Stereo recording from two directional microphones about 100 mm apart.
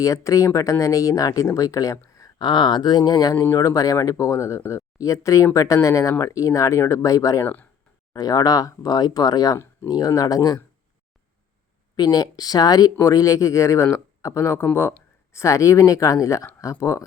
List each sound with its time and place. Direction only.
0.0 s speech: 35° left (ahead or behind)
2.4 s speech: 45° left (ahead or behind)
3.4 s speech: 30° left (ahead or behind)
7.4 s speech: 15° left (ahead or behind)
8.1 s speech: 40° left (ahead or behind)
11.9 s speech: 40° left (ahead or behind)